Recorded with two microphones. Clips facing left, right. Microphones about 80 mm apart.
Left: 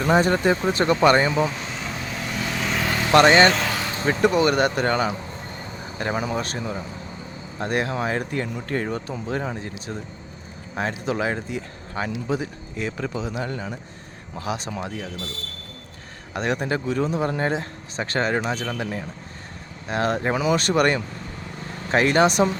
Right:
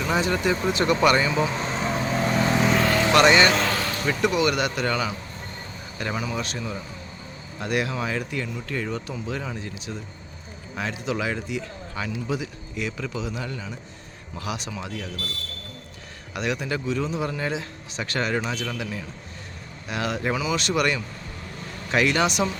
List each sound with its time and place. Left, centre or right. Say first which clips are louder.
0.0 s speech: left 5 dB; left
1.5 s vehicle: right 5 dB; right
3.1 s speech: left 4 dB; left
3.5 s vehicle: right 1 dB; centre
3.9 s speech: left 7 dB; left
6.6 s speech: left 3 dB; left
9.7 s speech: left 2 dB; left
16.3 s speech: left 3 dB; left